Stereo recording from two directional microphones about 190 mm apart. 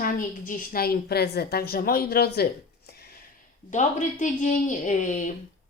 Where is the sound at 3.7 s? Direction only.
40° left (ahead or behind).